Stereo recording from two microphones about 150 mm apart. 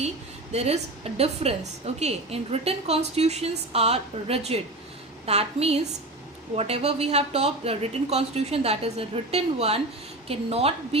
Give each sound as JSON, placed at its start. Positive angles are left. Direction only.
{"t": 0.5, "sound": "a woman's voice", "side_deg": -45}